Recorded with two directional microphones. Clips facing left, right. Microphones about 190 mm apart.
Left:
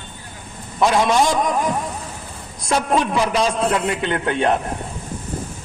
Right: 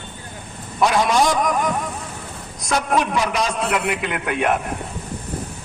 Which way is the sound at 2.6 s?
30° left (ahead or behind).